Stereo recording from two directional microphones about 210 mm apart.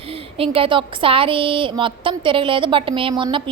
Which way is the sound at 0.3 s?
25° right (ahead or behind).